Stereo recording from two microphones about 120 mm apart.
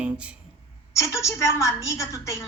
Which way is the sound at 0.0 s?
10° right (ahead or behind).